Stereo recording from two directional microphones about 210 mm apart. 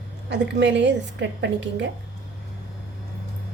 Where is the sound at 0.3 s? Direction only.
55° right (ahead or behind).